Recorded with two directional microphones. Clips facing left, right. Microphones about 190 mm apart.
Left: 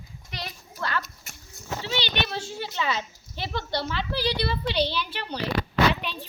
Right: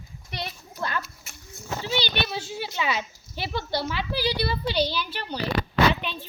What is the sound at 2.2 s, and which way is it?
A child's voice, 5° right (ahead or behind).